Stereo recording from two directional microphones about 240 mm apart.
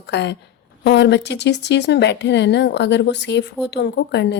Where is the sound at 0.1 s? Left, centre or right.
Left.